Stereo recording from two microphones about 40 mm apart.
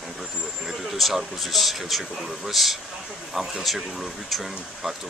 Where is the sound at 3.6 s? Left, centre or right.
Centre.